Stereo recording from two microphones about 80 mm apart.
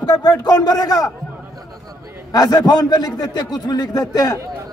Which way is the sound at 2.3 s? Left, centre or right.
Left.